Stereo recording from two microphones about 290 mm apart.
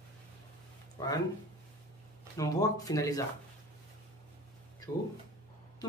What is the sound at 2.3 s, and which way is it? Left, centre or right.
Speech, centre.